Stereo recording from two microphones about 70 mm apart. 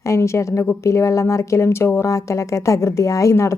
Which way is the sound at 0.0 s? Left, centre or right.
Left.